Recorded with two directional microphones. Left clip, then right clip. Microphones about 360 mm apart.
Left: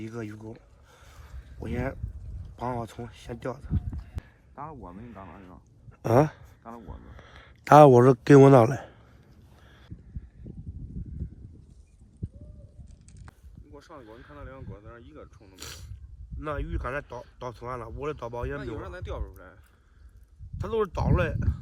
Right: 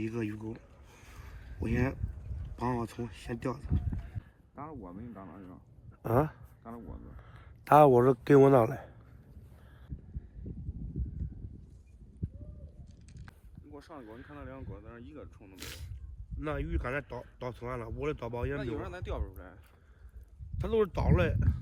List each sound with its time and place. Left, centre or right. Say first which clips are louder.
0.0 s speech: right 2 dB; centre
1.6 s speech: even; centre
4.5 s speech: left 4 dB; left
13.7 s speech: left 1 dB; centre
20.6 s speech: left 2 dB; centre